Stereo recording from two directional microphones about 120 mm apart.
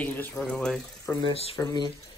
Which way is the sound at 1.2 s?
50° left (ahead or behind).